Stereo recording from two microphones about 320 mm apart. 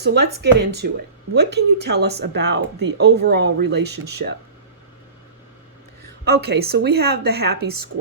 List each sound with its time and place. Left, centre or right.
0.0 s speech: right
6.2 s a woman's voice: right